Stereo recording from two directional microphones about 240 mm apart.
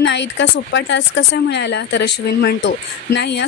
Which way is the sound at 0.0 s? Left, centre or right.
Left.